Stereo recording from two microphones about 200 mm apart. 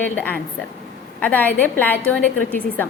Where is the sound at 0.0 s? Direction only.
10° left (ahead or behind).